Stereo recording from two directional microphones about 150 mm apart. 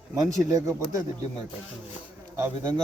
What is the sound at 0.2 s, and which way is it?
Speech, 25° right (ahead or behind).